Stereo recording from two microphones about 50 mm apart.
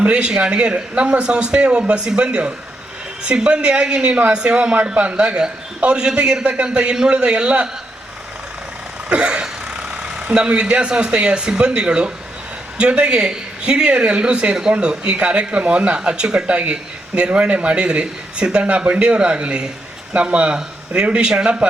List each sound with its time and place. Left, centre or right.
0.0 s speech: centre
9.0 s speech: right